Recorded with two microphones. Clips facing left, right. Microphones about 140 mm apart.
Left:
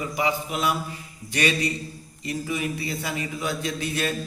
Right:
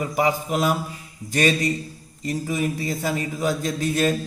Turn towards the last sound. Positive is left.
turn(degrees=-40)  # may be behind; listen again after turning